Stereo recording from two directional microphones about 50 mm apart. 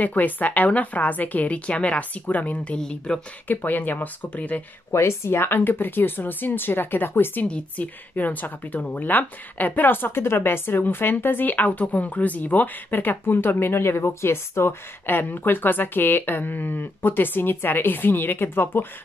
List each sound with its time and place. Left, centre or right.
0.0 s speech: left
2.8 s speech: centre
3.4 s speech: left
4.9 s speech: left
7.4 s speech: left
15.0 s speech: left